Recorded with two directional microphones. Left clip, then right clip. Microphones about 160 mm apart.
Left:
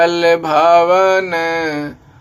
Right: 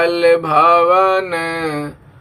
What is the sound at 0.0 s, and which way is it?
Mantra, 35° left (ahead or behind).